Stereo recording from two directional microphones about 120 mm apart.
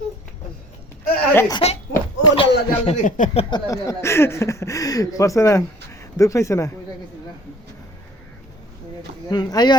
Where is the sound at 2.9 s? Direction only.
80° left.